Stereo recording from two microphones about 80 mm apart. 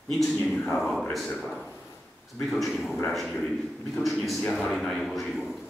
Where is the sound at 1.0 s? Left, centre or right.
Centre.